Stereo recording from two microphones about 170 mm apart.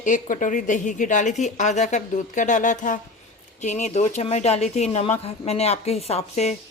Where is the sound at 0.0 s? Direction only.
50° left (ahead or behind).